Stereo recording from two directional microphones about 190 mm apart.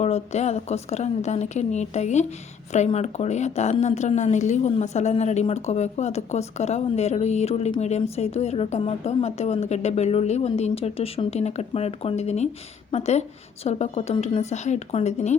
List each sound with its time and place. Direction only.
0.0 s a woman's voice: 35° left (ahead or behind)